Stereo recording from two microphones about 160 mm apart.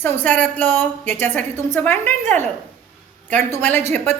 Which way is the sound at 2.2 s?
45° right (ahead or behind).